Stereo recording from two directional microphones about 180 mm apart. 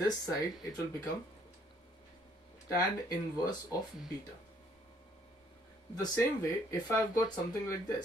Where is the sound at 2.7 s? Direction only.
20° left (ahead or behind).